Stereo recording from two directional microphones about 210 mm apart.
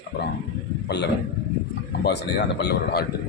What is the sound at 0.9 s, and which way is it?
Speech, 55° left (ahead or behind).